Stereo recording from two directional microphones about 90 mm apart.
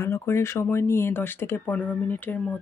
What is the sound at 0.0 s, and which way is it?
Speech, 30° left (ahead or behind).